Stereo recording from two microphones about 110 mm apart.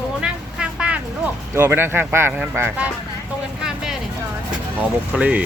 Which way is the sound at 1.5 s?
20° right (ahead or behind).